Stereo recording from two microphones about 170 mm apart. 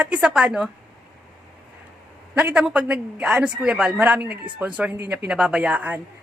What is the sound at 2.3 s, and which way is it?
A man's voice, 5° right (ahead or behind).